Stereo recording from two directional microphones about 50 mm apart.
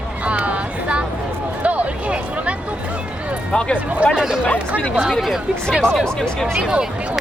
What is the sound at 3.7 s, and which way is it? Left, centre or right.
Speech, right.